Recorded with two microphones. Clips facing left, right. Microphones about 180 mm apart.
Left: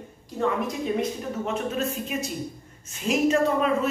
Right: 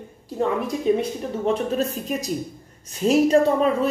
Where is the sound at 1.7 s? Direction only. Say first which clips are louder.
Right 3 dB; 35° right (ahead or behind).